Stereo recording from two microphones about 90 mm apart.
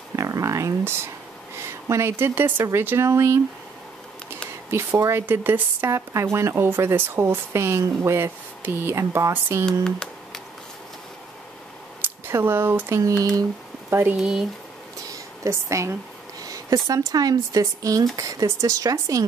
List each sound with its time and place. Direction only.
0.1 s speech: 35° right (ahead or behind)
4.6 s speech: 30° right (ahead or behind)
9.7 s a sound: 5° left (ahead or behind)
12.0 s speech: 25° right (ahead or behind)
13.0 s speech: 40° right (ahead or behind)
13.8 s speech: 25° right (ahead or behind)
14.1 s speech: 10° right (ahead or behind)
15.4 s speech: 35° right (ahead or behind)